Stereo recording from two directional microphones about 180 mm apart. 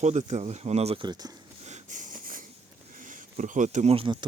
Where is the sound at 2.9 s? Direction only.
45° right (ahead or behind); by 4.2 s 30° right (ahead or behind).